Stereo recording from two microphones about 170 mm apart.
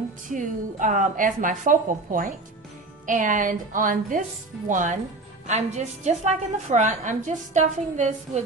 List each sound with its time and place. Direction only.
0.3 s a woman's voice: 50° right (ahead or behind)